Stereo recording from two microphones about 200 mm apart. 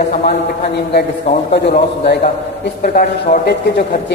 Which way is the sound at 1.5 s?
55° left (ahead or behind).